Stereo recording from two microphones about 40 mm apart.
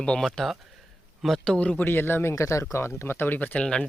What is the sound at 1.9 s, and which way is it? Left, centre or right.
Speech, left.